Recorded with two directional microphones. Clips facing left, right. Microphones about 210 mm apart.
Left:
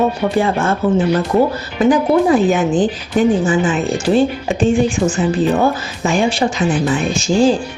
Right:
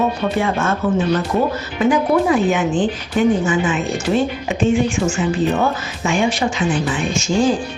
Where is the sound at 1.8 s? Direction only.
35° left (ahead or behind).